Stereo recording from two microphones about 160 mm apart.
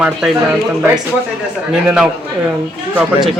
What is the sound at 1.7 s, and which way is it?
Speech, 5° right (ahead or behind).